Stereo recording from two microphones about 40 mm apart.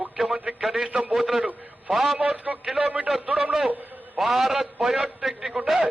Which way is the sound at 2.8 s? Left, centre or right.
Right.